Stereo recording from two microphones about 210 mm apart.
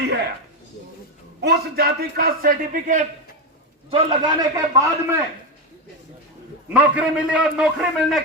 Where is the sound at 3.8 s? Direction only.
25° right (ahead or behind).